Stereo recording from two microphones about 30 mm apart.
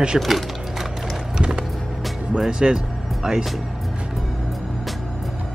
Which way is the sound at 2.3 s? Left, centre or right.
Right.